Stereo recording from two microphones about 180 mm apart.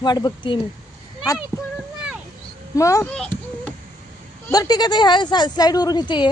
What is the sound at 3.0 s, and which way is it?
Speech, 5° left (ahead or behind).